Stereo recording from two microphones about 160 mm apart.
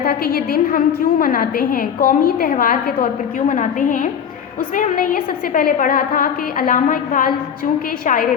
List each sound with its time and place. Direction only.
0.0 s a woman's voice: 75° left (ahead or behind); by 8.4 s 55° left (ahead or behind)